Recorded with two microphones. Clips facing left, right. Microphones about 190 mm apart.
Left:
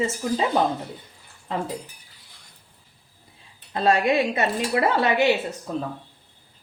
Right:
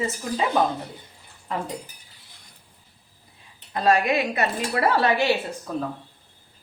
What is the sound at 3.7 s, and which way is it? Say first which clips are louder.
A woman's voice: left 1 dB; 25° left (ahead or behind).